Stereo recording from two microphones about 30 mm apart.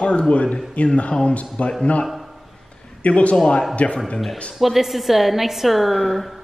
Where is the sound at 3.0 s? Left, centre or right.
Left.